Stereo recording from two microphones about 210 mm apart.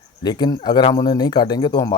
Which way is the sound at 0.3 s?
20° left (ahead or behind).